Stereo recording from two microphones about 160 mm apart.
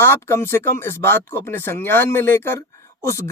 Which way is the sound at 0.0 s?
15° left (ahead or behind).